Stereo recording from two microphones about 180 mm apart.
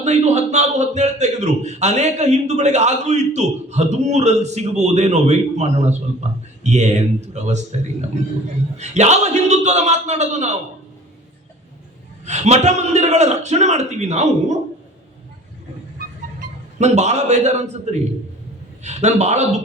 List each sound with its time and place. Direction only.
0.0 s a man's voice: 40° right (ahead or behind)
8.8 s a man's voice: 40° right (ahead or behind)
12.2 s a man's voice: 40° right (ahead or behind)
16.7 s a man's voice: 40° right (ahead or behind)